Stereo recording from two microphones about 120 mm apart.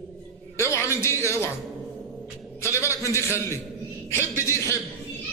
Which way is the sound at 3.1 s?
20° left (ahead or behind).